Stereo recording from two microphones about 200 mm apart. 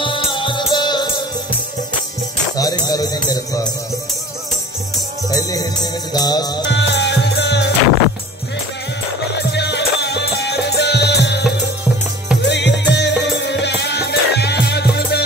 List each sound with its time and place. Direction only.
0.0 s music: 25° left (ahead or behind)
2.5 s music: 20° left (ahead or behind)
5.3 s music: 15° left (ahead or behind)
6.6 s music: 60° left (ahead or behind)
9.4 s music: 60° left (ahead or behind)
12.4 s music: 60° left (ahead or behind)